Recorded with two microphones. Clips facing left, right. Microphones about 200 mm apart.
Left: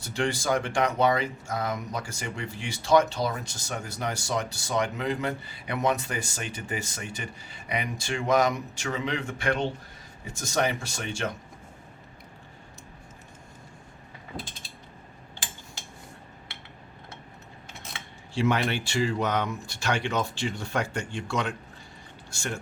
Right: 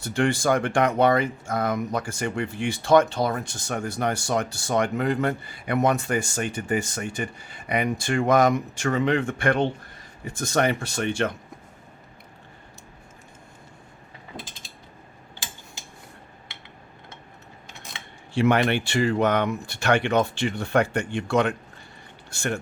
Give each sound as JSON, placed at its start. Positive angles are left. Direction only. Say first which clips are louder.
{"t": 0.0, "sound": "speech", "louder": "right 6 dB", "side_deg": -55}
{"t": 18.3, "sound": "speech", "louder": "right 5 dB", "side_deg": -60}